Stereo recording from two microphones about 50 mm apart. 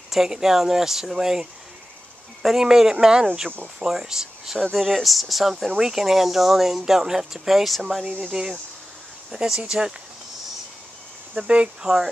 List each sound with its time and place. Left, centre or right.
0.1 s speech: centre
8.3 s speech: centre
11.3 s speech: right
11.8 s speech: centre